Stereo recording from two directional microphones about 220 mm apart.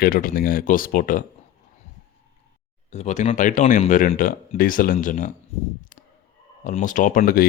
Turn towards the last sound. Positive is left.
turn(degrees=40)  # may be behind; listen again after turning